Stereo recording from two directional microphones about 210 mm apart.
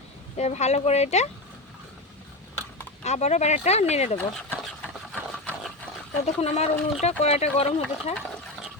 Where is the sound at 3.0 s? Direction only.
30° left (ahead or behind).